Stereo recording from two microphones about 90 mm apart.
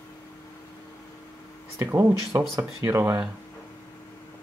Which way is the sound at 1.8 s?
30° right (ahead or behind).